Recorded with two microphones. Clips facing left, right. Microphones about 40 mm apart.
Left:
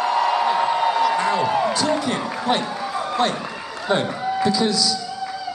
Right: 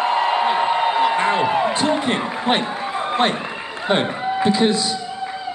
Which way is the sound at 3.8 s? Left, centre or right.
Right.